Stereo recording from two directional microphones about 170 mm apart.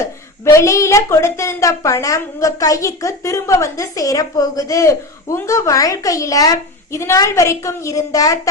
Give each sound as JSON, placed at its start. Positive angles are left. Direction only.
{"t": 0.0, "sound": "a woman's voice", "side_deg": 15}